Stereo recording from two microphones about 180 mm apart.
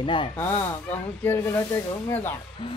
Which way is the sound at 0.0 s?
30° left (ahead or behind).